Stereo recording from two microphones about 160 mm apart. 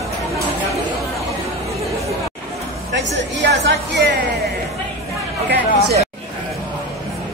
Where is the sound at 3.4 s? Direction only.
90° right.